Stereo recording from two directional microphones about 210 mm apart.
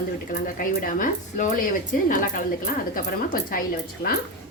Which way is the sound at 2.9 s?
40° left (ahead or behind).